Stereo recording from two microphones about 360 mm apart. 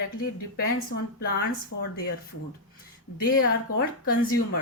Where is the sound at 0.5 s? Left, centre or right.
Left.